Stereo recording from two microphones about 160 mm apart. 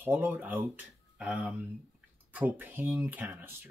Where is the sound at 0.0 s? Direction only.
10° right (ahead or behind).